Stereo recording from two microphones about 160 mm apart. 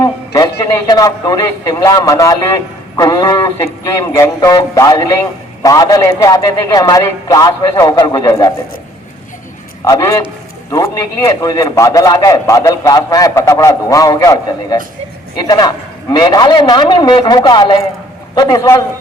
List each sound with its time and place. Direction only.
0.0 s a man's voice: 20° left (ahead or behind)
9.8 s a man's voice: 20° left (ahead or behind)